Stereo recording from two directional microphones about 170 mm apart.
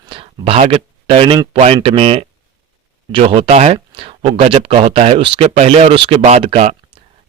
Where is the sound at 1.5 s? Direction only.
35° right (ahead or behind).